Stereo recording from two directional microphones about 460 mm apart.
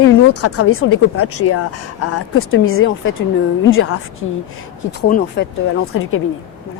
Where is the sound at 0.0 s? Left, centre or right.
Left.